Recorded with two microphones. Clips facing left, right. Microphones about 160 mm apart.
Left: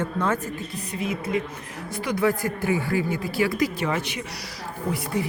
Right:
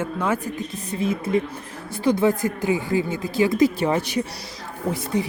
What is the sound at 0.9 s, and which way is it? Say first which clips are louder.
Speech: right 4 dB; 30° right (ahead or behind).